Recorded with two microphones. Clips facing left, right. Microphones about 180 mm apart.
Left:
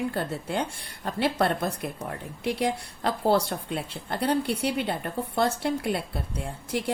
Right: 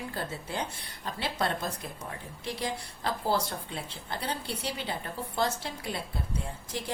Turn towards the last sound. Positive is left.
turn(degrees=60)  # may be behind; listen again after turning